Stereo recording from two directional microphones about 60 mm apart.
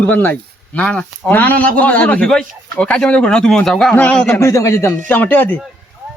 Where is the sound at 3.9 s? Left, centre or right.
Left.